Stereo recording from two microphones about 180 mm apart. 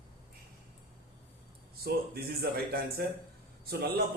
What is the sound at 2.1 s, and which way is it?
Speech, 60° right (ahead or behind).